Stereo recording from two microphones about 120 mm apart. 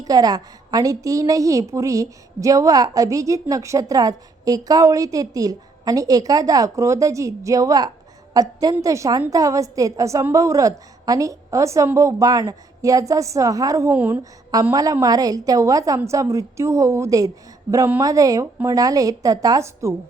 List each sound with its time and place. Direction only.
0.0 s a woman's voice: 30° right (ahead or behind)
13.9 s a woman's voice: 15° right (ahead or behind)
14.7 s a woman's voice: 30° right (ahead or behind)